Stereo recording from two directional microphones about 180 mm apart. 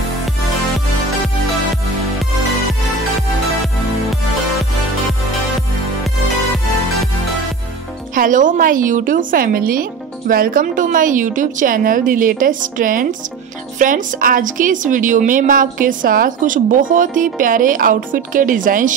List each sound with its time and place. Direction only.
8.1 s a woman's voice: 45° right (ahead or behind)